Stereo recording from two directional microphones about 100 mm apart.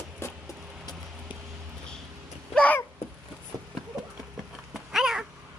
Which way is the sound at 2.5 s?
15° left (ahead or behind).